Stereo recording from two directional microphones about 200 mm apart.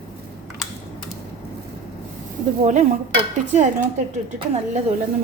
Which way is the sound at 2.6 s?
35° right (ahead or behind).